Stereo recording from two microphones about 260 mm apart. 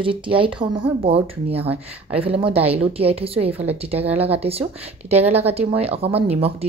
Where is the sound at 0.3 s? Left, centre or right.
Centre.